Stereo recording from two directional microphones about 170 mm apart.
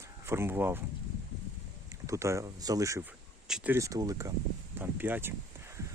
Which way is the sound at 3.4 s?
5° right (ahead or behind).